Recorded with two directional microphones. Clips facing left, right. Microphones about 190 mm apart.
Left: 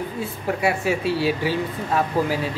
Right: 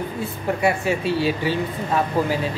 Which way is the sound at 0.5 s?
5° left (ahead or behind).